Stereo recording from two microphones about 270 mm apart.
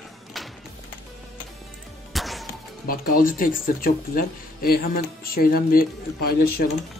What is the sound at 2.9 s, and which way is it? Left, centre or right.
Speech, left.